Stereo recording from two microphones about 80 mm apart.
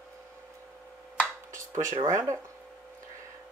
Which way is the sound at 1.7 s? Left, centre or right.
Right.